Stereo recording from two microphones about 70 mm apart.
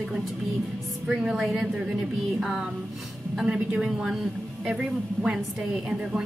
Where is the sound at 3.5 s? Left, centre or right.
Centre.